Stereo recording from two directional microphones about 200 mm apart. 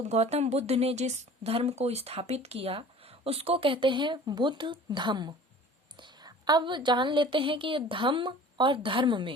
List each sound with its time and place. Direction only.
0.0 s speech: 35° right (ahead or behind)